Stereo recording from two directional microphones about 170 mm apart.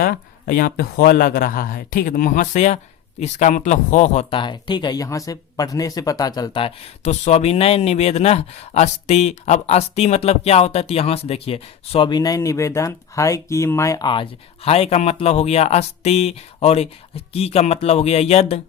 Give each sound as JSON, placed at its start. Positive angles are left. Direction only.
{"t": 0.0, "sound": "speech", "side_deg": 60}